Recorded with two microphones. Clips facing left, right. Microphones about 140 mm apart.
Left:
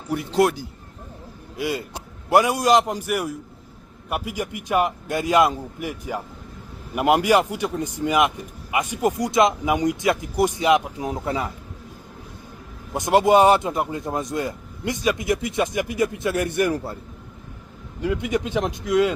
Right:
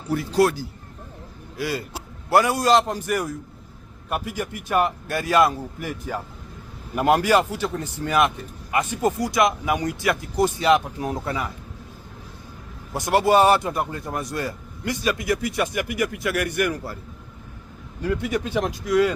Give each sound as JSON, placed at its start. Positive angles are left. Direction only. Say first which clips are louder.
{"t": 0.1, "sound": "a man's voice", "louder": "even", "side_deg": 20}
{"t": 11.3, "sound": "a man's voice", "louder": "left 2 dB", "side_deg": 30}
{"t": 12.9, "sound": "a man's voice", "louder": "left 2 dB", "side_deg": 20}
{"t": 18.0, "sound": "a man's voice", "louder": "left 1 dB", "side_deg": 20}